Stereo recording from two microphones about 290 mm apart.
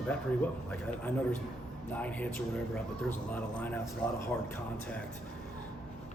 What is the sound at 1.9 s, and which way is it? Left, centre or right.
Speech, centre.